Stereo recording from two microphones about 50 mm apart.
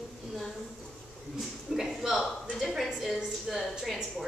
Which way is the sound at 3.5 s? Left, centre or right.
Centre.